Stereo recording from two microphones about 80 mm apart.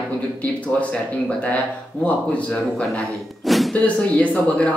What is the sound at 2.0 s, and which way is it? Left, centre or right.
Speech, centre.